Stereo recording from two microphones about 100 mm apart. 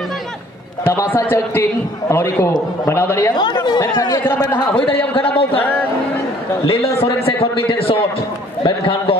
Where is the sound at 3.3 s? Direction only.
45° left (ahead or behind).